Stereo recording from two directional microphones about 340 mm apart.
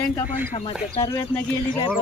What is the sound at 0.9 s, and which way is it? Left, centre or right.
Speech, centre.